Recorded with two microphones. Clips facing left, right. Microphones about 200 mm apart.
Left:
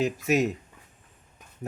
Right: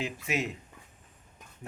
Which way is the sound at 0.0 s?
40° left (ahead or behind).